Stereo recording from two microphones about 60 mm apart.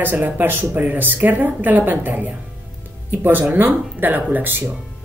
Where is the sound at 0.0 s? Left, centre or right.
Right.